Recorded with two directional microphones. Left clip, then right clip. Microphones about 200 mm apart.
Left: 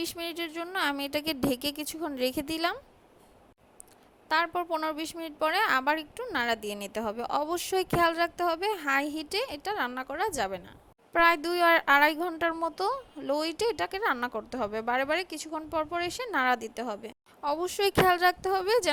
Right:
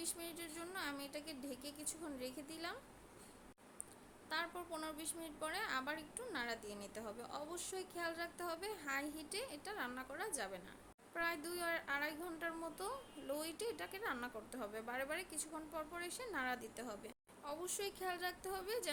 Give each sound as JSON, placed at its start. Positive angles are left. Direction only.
{"t": 0.0, "sound": "a woman's voice", "side_deg": 45}
{"t": 4.3, "sound": "a woman's voice", "side_deg": 45}